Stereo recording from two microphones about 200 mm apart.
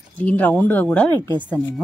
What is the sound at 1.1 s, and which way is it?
Speech, 20° right (ahead or behind).